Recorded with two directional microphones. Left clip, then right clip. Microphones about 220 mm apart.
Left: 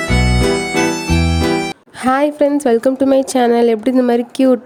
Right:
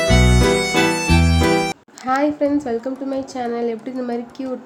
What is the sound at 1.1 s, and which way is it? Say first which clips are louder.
Music: left 1 dB; 5° right (ahead or behind).